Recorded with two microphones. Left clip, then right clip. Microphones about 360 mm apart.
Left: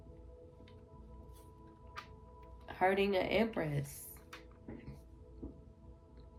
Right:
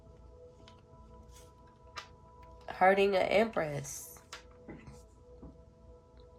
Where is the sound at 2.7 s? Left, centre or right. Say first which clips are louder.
Right 6 dB; centre.